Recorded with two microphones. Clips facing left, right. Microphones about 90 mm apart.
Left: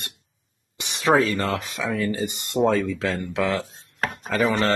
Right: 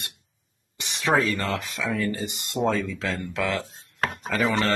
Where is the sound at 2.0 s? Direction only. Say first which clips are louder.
Left 3 dB; centre (ahead or behind).